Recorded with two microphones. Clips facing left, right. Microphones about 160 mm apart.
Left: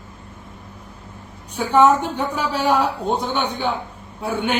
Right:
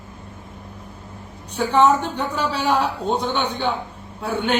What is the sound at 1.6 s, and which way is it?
A man's voice, 10° left (ahead or behind).